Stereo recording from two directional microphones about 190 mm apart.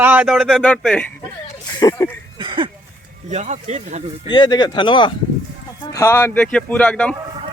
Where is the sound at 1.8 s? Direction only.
20° left (ahead or behind).